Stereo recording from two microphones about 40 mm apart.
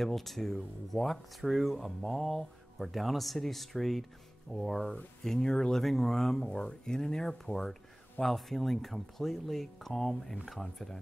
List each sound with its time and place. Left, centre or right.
0.0 s speech: centre
5.2 s speech: centre
5.8 s speech: centre
6.5 s speech: left; by 11.0 s centre